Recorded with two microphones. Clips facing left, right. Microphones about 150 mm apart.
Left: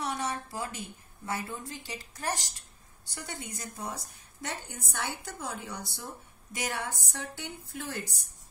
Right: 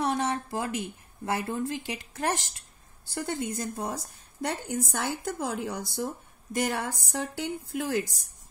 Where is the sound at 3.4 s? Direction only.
55° right (ahead or behind).